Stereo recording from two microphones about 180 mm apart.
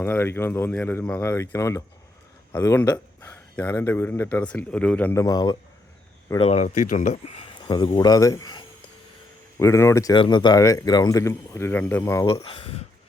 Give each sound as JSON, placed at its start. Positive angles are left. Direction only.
{"t": 0.0, "sound": "speech", "side_deg": 10}
{"t": 6.3, "sound": "speech", "side_deg": 35}
{"t": 7.6, "sound": "speech", "side_deg": 25}
{"t": 12.2, "sound": "speech", "side_deg": 30}